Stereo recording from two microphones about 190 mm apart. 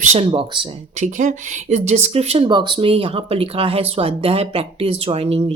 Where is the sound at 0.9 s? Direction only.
40° right (ahead or behind).